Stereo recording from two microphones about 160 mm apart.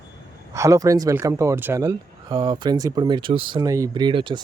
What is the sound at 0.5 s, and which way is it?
Speech, 20° right (ahead or behind).